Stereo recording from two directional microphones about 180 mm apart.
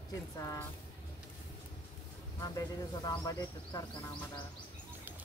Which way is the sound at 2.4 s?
20° left (ahead or behind).